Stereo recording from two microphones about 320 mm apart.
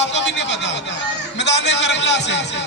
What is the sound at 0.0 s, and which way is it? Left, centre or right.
Speech, left.